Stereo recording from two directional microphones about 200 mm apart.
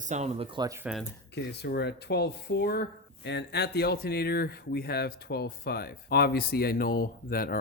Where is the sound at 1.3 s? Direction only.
55° left (ahead or behind).